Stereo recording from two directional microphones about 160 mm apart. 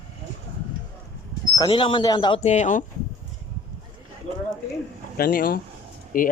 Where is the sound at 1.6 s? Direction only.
30° left (ahead or behind).